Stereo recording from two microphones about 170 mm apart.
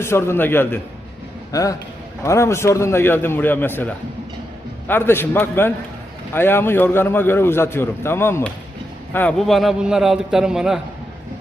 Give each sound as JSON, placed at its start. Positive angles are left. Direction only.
{"t": 0.0, "sound": "a man's voice", "side_deg": 15}